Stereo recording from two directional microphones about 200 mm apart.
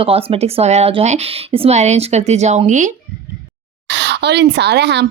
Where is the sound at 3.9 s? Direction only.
60° right (ahead or behind).